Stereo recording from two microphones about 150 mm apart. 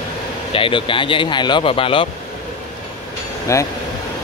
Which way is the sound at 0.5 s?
35° left (ahead or behind).